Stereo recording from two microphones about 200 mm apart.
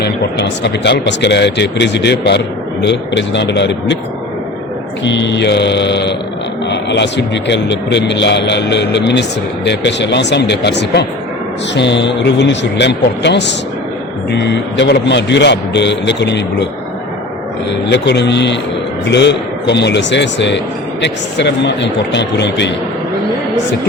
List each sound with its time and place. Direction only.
0.0 s a man's voice: 60° left (ahead or behind)
5.0 s a man's voice: 65° left (ahead or behind)
17.9 s a man's voice: 60° left (ahead or behind)